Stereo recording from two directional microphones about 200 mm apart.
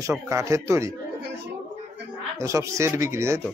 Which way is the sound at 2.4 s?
15° right (ahead or behind).